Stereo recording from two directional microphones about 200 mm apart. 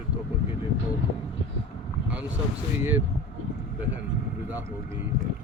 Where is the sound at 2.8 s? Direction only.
10° right (ahead or behind).